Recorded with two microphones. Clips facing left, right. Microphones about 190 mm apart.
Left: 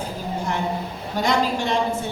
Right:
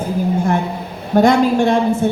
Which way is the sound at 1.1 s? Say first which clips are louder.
Right 10 dB; 55° right (ahead or behind).